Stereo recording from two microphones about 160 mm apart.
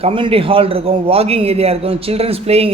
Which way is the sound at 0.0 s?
35° right (ahead or behind).